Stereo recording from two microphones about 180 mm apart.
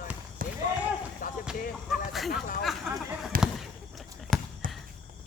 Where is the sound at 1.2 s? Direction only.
50° left (ahead or behind).